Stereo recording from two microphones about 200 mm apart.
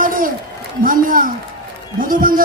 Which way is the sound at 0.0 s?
45° right (ahead or behind).